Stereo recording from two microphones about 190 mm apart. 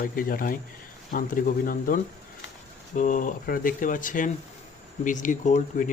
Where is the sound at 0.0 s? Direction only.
50° left (ahead or behind).